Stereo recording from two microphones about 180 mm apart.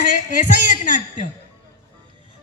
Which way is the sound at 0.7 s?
45° left (ahead or behind).